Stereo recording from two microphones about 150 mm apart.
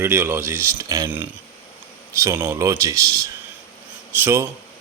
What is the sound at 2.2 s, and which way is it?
Speech, 20° right (ahead or behind).